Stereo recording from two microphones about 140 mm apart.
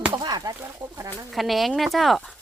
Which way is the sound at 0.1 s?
30° right (ahead or behind).